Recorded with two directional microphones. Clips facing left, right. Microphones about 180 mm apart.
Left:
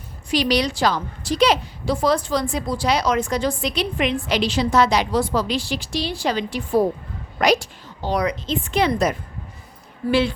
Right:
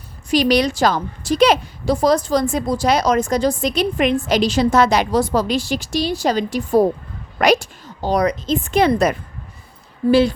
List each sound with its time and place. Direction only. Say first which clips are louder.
0.3 s a woman's voice: right 4 dB; 50° right (ahead or behind)
7.3 s a woman's voice: right 3 dB; 60° right (ahead or behind)
10.1 s speech: right 5 dB; 40° right (ahead or behind)